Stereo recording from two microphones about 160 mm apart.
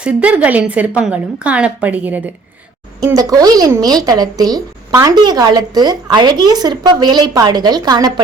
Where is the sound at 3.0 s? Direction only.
20° right (ahead or behind).